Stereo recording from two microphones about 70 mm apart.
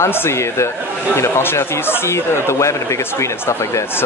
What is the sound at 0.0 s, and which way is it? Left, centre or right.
Speech, left.